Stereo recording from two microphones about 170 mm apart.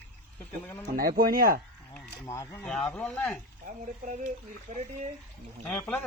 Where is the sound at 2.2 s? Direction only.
20° left (ahead or behind).